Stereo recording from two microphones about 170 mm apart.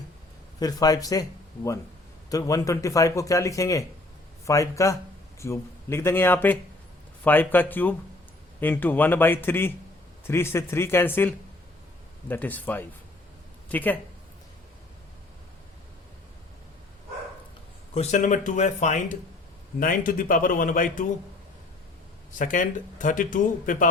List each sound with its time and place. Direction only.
0.6 s a man's voice: 20° left (ahead or behind)
2.3 s a man's voice: 20° left (ahead or behind)
17.9 s speech: 40° left (ahead or behind)
19.8 s speech: 55° left (ahead or behind)
22.3 s speech: 50° left (ahead or behind)